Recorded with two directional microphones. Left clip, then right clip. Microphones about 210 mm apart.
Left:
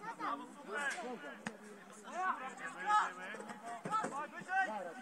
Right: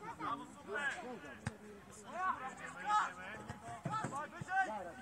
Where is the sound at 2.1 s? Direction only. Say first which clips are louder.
Left 1 dB; centre (ahead or behind).